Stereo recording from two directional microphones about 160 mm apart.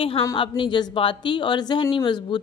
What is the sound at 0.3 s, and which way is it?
A woman's voice, 30° left (ahead or behind).